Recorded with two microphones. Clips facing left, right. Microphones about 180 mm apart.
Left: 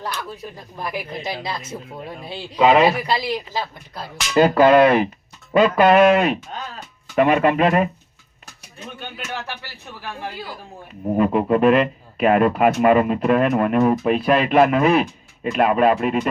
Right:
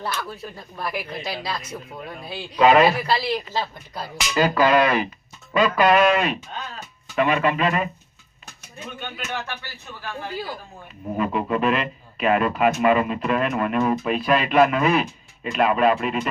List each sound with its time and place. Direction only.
0.0 s speech: 15° left (ahead or behind)
4.4 s speech: 55° left (ahead or behind)
11.2 s speech: 50° left (ahead or behind)